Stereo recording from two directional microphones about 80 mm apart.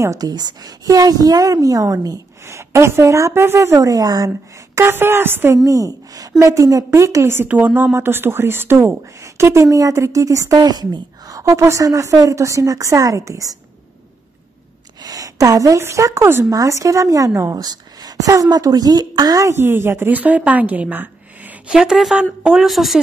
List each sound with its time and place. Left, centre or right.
0.2 s a woman's voice: right
4.7 s speech: right
5.7 s speech: right
7.4 s speech: centre; by 13.6 s right
15.0 s a woman's voice: right
17.6 s a woman's voice: right
19.5 s a woman's voice: right
21.7 s a woman's voice: centre